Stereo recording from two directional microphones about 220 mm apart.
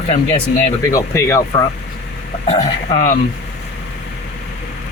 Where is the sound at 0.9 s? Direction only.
10° left (ahead or behind).